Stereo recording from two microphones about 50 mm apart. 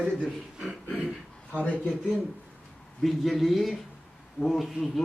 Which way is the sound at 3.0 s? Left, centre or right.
Centre.